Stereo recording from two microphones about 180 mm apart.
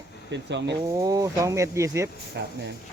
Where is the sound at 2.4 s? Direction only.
65° right (ahead or behind).